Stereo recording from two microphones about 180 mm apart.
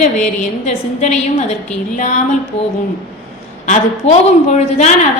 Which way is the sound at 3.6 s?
40° left (ahead or behind).